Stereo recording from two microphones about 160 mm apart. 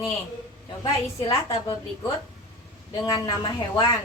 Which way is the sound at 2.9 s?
25° left (ahead or behind).